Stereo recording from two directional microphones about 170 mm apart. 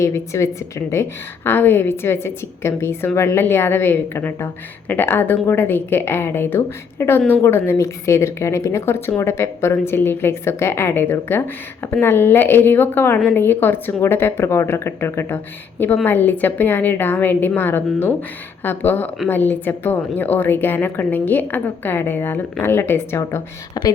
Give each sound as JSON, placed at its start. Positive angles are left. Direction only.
{"t": 0.0, "sound": "a woman's voice", "side_deg": 15}